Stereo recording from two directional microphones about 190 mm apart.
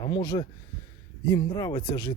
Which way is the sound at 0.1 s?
20° left (ahead or behind).